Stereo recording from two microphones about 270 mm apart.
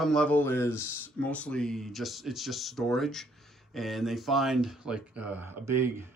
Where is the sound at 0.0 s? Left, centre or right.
Centre.